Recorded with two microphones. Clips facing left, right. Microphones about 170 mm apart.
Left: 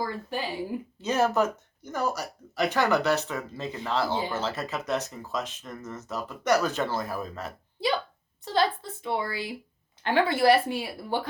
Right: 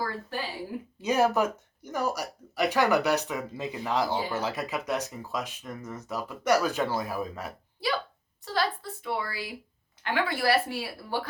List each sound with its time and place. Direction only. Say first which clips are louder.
0.0 s speech: left 2 dB; 15° left (ahead or behind)
1.0 s speech: even; 10° right (ahead or behind)
8.5 s a woman's voice: left 4 dB; 25° left (ahead or behind)